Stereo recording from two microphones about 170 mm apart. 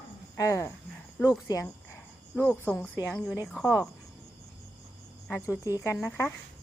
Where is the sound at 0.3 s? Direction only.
20° left (ahead or behind).